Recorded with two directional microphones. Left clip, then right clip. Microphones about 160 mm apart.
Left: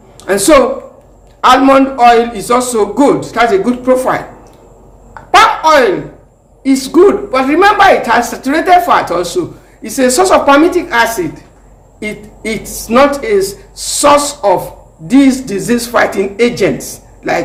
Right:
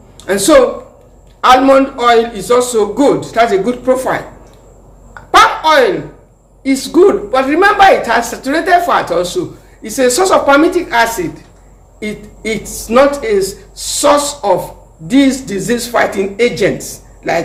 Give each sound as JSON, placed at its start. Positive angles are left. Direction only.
{"t": 0.3, "sound": "a man's voice", "side_deg": 30}
{"t": 5.4, "sound": "speech", "side_deg": 30}